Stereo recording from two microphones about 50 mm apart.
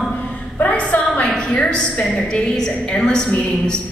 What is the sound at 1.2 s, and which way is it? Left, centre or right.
A woman's voice, centre.